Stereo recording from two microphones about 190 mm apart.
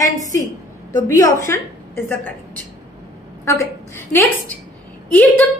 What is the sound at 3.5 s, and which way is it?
A woman's voice, 10° left (ahead or behind).